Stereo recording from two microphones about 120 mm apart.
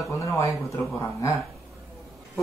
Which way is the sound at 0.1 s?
25° left (ahead or behind).